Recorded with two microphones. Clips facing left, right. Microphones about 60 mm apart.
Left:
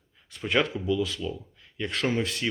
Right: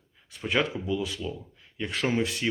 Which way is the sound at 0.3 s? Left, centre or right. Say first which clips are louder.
Left 2 dB; centre.